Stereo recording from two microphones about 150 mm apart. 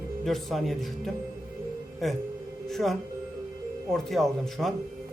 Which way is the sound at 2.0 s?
Centre (ahead or behind).